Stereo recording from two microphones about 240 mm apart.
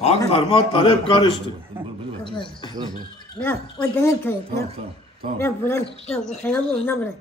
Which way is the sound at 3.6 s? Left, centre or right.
Centre.